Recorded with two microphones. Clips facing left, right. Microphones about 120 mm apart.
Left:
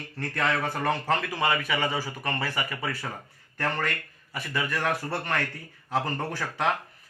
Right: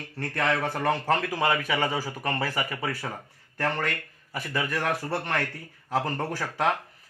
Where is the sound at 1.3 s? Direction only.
40° right (ahead or behind).